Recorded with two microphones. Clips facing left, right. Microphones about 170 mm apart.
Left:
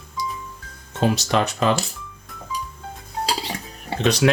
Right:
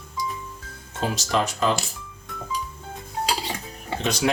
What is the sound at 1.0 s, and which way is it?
Speech, 70° left (ahead or behind).